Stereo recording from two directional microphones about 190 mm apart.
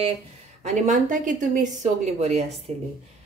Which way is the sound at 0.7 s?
40° right (ahead or behind).